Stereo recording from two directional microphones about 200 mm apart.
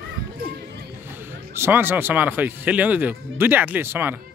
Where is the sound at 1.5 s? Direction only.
10° right (ahead or behind).